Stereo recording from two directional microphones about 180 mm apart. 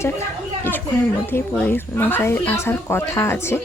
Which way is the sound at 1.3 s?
10° left (ahead or behind).